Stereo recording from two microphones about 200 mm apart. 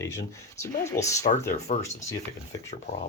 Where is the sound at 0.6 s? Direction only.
15° left (ahead or behind).